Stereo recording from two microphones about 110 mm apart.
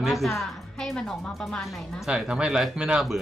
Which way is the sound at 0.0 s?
Centre (ahead or behind).